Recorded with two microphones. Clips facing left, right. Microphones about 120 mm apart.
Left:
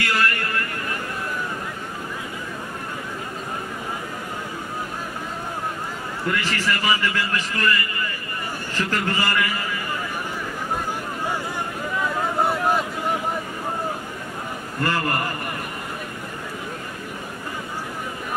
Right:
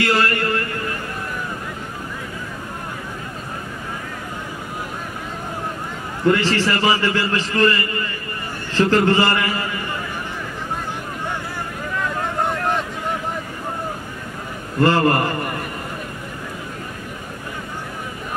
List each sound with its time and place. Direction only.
0.0 s a sound: 30° right (ahead or behind)
6.2 s a man's voice: 30° right (ahead or behind)
12.0 s vehicle: 5° left (ahead or behind)
14.8 s a man's voice: 30° right (ahead or behind)